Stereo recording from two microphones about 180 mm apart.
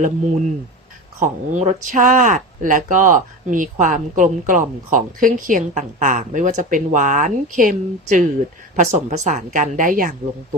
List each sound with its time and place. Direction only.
1.2 s speech: 45° right (ahead or behind)